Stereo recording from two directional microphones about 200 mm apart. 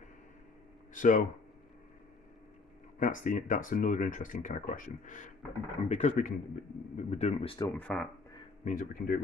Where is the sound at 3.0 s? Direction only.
40° left (ahead or behind); by 7.7 s 25° left (ahead or behind).